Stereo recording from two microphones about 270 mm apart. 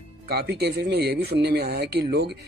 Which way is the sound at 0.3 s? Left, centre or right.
Right.